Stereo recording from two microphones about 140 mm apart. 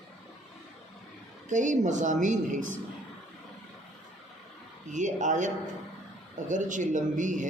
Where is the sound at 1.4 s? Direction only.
60° right (ahead or behind).